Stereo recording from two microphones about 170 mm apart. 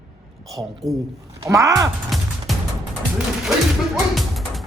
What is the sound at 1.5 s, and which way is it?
Speech, 20° right (ahead or behind).